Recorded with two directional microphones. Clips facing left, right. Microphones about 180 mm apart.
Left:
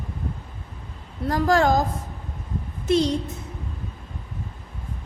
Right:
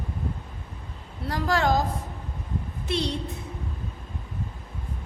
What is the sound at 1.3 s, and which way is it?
Music, 45° left (ahead or behind).